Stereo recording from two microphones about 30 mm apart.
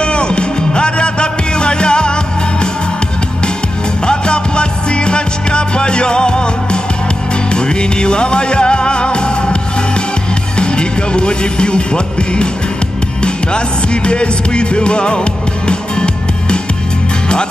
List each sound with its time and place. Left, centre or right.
0.0 s music: left
4.0 s music: left
10.6 s music: left
14.0 s music: left